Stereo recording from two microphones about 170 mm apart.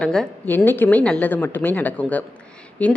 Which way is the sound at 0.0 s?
5° left (ahead or behind).